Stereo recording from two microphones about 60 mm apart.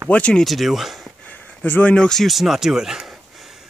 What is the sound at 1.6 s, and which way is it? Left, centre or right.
Speech, left.